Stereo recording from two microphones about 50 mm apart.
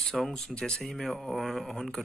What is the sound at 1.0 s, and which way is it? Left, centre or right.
Speech, centre.